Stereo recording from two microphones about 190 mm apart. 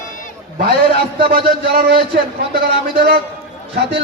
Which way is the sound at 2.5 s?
55° right (ahead or behind).